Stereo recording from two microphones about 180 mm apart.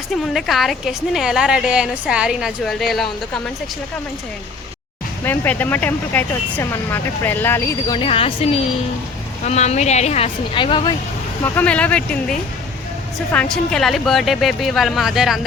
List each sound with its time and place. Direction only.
0.3 s a woman's voice: centre (ahead or behind)
5.2 s speech: 10° left (ahead or behind)
7.9 s a woman's voice: 30° left (ahead or behind)
11.4 s a woman's voice: 10° left (ahead or behind)